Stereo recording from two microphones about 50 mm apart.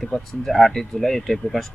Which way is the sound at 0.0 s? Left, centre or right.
Centre.